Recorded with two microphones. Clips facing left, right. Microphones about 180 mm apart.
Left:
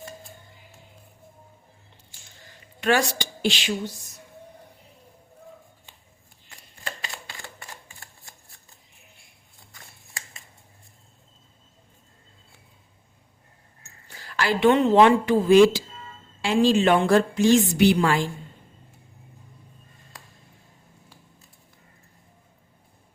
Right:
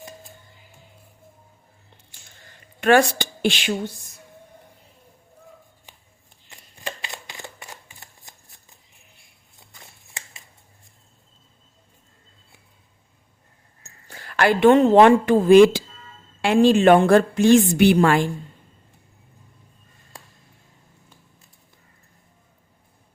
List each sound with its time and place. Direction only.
2.8 s speech: 55° right (ahead or behind)
6.8 s shuffling cards: 15° right (ahead or behind)
10.2 s a sound: 20° right (ahead or behind)
14.1 s a woman's voice: 55° right (ahead or behind)